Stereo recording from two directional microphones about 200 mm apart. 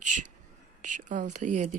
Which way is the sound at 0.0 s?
40° right (ahead or behind).